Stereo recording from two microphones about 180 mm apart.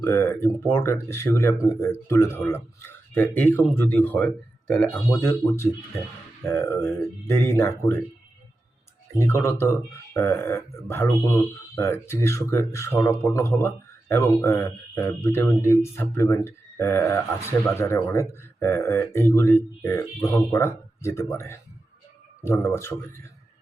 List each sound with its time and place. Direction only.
0.0 s speech: 15° left (ahead or behind)
9.1 s speech: 15° left (ahead or behind)
22.6 s speech: 15° left (ahead or behind)